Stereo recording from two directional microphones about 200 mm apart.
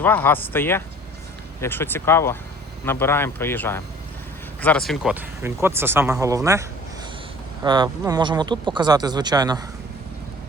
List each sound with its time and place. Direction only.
0.0 s speech: 10° left (ahead or behind)
5.4 s speech: 10° right (ahead or behind)